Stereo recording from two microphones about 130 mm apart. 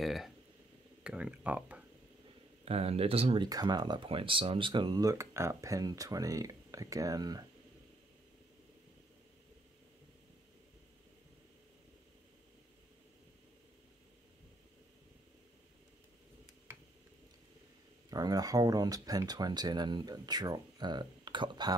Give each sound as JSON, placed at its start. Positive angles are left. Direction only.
{"t": 0.0, "sound": "speech", "side_deg": 0}
{"t": 2.6, "sound": "speech", "side_deg": -50}
{"t": 3.4, "sound": "speech", "side_deg": -30}
{"t": 18.1, "sound": "speech", "side_deg": -30}